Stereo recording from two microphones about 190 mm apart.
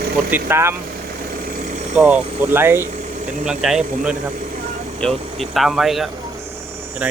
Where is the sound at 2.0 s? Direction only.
5° right (ahead or behind).